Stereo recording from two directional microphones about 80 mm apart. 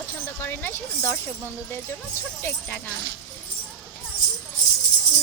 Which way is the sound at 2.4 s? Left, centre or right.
Left.